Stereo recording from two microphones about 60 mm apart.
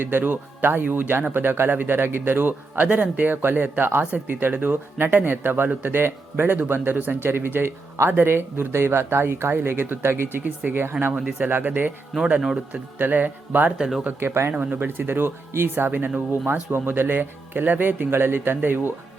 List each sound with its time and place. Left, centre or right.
0.0 s speech: right
10.3 s speech: right
11.3 s speech: right
12.4 s a man's voice: centre
13.0 s speech: right
13.7 s a man's voice: centre
14.2 s speech: right
14.5 s speech: right